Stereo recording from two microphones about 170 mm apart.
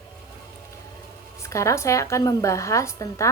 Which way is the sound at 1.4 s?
15° left (ahead or behind).